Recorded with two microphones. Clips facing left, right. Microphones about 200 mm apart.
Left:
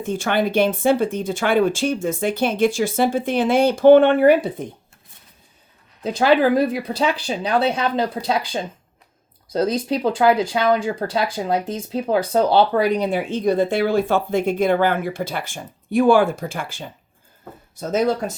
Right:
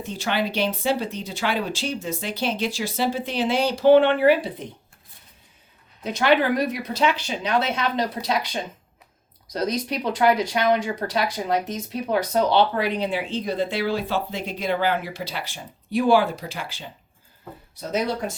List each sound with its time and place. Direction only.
0.0 s speech: 50° left (ahead or behind)
6.0 s speech: 30° left (ahead or behind); by 16.8 s 50° left (ahead or behind)